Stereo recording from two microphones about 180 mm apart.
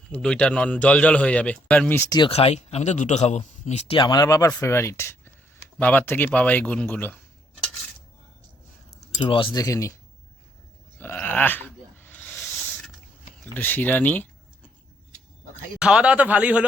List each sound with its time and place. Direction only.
0.1 s speech: 5° left (ahead or behind)
9.1 s speech: 25° left (ahead or behind)
11.0 s a sound: 10° left (ahead or behind)
13.5 s speech: 10° left (ahead or behind)
15.8 s speech: 5° right (ahead or behind)